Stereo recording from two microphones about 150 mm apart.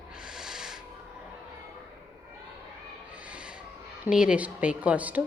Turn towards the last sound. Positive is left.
turn(degrees=-10)  # may be behind; listen again after turning